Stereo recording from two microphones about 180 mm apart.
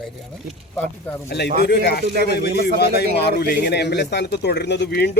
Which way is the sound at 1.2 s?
65° left (ahead or behind).